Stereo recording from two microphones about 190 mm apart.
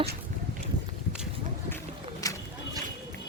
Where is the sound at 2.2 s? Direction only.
20° left (ahead or behind).